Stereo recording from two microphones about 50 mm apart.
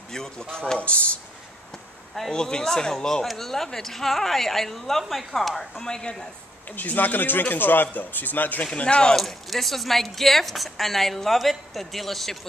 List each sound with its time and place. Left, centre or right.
0.1 s speech: centre
0.7 s speech: left
1.7 s speech: centre
5.6 s speech: centre
6.7 s speech: left
8.7 s speech: left
9.1 s speech: centre